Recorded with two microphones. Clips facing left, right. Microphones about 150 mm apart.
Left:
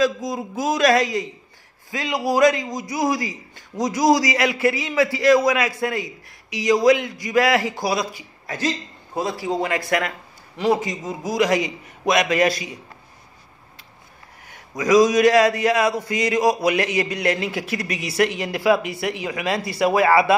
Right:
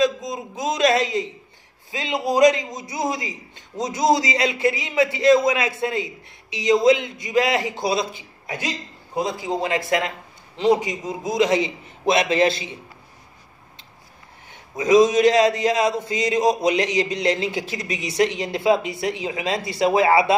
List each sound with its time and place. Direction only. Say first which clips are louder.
0.0 s a man's voice: even; 20° right (ahead or behind)
14.5 s a man's voice: right 1 dB; 25° right (ahead or behind)